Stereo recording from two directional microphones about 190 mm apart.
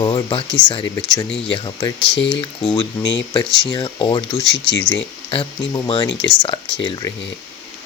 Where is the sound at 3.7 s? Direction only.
25° left (ahead or behind).